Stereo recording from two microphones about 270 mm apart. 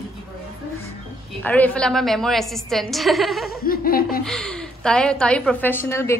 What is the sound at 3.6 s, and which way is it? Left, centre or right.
Laughter, left.